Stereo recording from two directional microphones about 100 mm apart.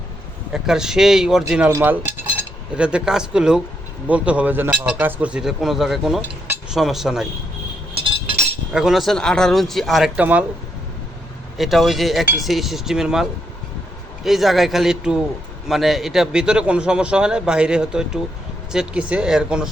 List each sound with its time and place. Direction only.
0.5 s speech: 5° right (ahead or behind)
1.8 s cutlery: 20° right (ahead or behind)
2.7 s a man's voice: 10° right (ahead or behind)
7.9 s a sound: 65° right (ahead or behind)
8.7 s speech: 5° right (ahead or behind)
10.2 s a man's voice: 15° right (ahead or behind)
11.5 s speech: centre (ahead or behind)
14.3 s a man's voice: centre (ahead or behind)